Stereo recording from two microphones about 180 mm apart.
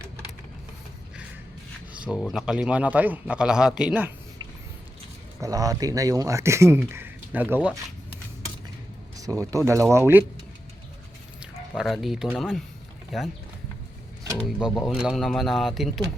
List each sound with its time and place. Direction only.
1.9 s speech: 5° right (ahead or behind)
5.4 s speech: 20° right (ahead or behind)
9.1 s speech: 20° right (ahead or behind)
11.8 s speech: centre (ahead or behind)
14.3 s speech: centre (ahead or behind)